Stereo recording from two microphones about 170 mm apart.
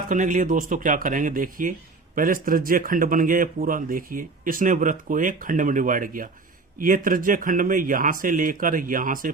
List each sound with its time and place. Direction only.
0.1 s speech: 50° right (ahead or behind)